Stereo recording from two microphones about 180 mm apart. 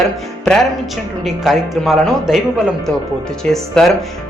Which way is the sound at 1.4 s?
Centre (ahead or behind).